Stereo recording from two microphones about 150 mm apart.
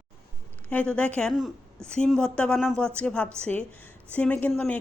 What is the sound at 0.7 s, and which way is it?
Speech, 10° left (ahead or behind).